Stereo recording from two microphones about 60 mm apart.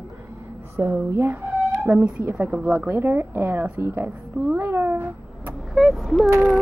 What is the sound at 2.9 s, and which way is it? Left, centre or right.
Speech, right.